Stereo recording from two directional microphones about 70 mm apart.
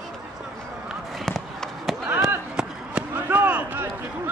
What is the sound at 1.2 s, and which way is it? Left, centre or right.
Run, centre.